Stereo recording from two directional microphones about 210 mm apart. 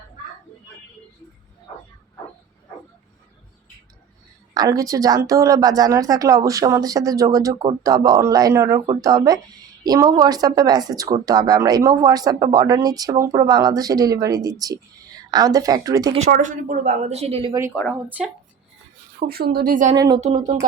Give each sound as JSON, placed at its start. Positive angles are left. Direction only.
{"t": 4.5, "sound": "a woman's voice", "side_deg": -15}
{"t": 16.3, "sound": "a woman's voice", "side_deg": -40}
{"t": 18.2, "sound": "speech", "side_deg": 0}
{"t": 19.3, "sound": "a woman's voice", "side_deg": -45}
{"t": 20.0, "sound": "a woman's voice", "side_deg": -20}
{"t": 20.2, "sound": "a woman's voice", "side_deg": -35}